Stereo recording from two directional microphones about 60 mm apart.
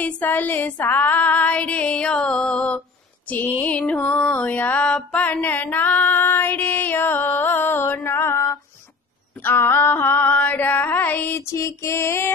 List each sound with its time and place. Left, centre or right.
0.0 s female singing: left
3.3 s music: left
3.6 s female singing: left
5.4 s female singing: left
8.1 s mantra: left
9.4 s female singing: left
11.3 s music: left